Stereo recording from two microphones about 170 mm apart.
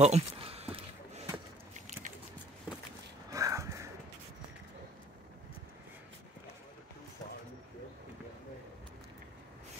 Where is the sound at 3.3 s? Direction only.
20° right (ahead or behind).